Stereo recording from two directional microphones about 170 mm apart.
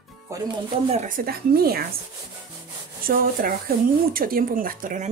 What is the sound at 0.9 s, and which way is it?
Speech, 50° right (ahead or behind).